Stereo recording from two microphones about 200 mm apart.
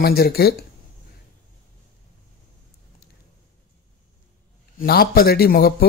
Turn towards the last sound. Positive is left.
turn(degrees=50)  # may be behind; listen again after turning